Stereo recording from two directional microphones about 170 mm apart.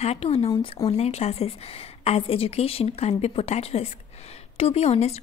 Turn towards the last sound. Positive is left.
turn(degrees=40)  # may be behind; listen again after turning